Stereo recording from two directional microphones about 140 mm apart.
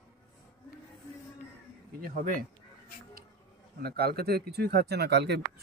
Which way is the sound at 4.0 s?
90° right.